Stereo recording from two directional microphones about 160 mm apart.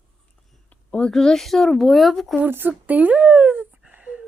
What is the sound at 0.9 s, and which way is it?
Speech, 5° left (ahead or behind).